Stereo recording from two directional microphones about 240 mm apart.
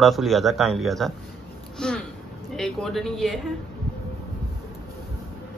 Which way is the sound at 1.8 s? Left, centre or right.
Centre.